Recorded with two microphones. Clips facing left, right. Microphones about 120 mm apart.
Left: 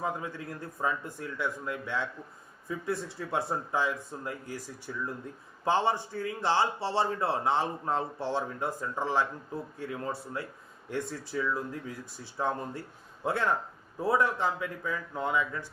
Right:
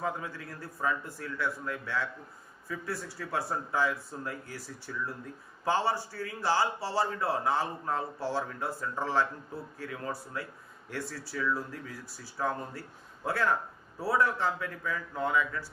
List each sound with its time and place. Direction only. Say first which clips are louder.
0.0 s a man's voice: left 1 dB; 20° left (ahead or behind)